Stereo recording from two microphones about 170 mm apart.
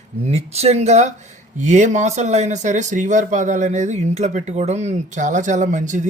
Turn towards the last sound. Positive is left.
turn(degrees=-45)  # may be behind; listen again after turning